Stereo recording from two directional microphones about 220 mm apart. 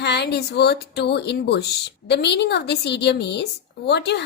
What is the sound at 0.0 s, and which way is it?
Speech, 50° left (ahead or behind).